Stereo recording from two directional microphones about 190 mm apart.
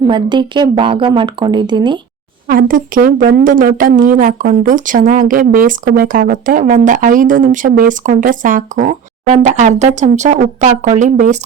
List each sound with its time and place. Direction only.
0.1 s a woman's voice: 25° right (ahead or behind)
2.5 s speech: 50° right (ahead or behind)